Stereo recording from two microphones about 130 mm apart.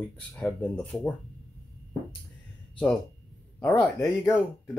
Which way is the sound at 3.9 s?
20° left (ahead or behind).